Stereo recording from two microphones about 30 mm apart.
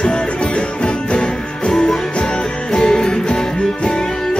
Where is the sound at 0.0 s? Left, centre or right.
Left.